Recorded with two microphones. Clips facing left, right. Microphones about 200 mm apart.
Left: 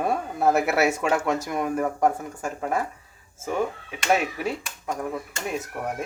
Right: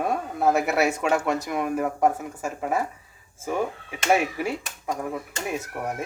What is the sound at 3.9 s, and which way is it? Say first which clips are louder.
Speech: right 3 dB; 10° right (ahead or behind).